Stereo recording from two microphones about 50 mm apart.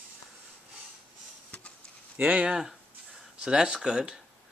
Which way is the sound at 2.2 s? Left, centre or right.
Right.